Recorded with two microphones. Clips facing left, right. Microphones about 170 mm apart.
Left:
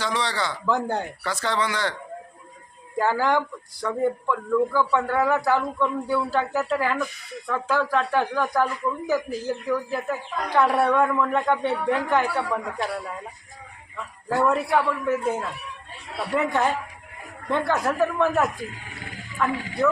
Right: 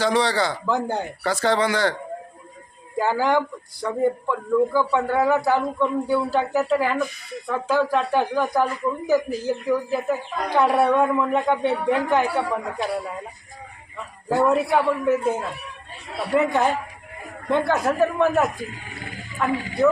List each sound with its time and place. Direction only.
0.0 s speech: 35° right (ahead or behind)
0.6 s speech: 5° right (ahead or behind)
1.2 s speech: 35° right (ahead or behind)
3.0 s speech: 5° right (ahead or behind)